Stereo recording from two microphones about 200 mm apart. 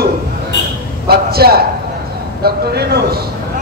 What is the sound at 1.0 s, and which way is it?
A man's voice, 50° right (ahead or behind).